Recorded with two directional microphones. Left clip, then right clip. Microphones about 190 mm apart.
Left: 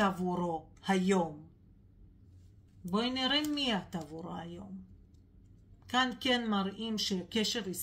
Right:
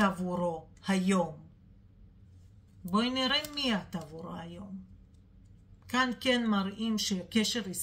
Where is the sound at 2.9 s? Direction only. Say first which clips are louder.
Right 2 dB; 20° left (ahead or behind).